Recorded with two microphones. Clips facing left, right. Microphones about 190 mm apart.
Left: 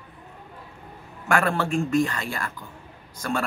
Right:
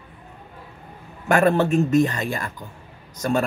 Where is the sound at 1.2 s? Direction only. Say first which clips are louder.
Right 6 dB; 20° right (ahead or behind).